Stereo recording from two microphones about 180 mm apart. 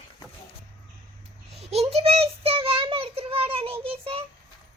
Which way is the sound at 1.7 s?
35° right (ahead or behind).